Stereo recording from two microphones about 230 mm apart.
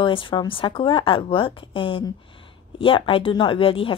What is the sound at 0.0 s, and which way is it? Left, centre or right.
A woman's voice, left.